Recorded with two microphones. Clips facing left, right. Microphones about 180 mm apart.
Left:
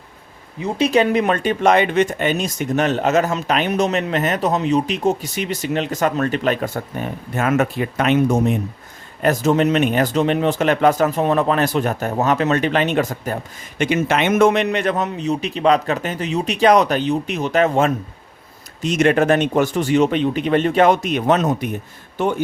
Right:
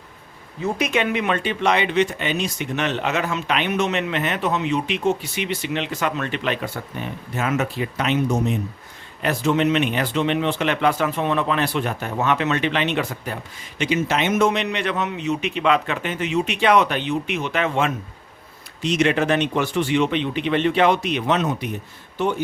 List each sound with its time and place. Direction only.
0.8 s speech: 35° left (ahead or behind)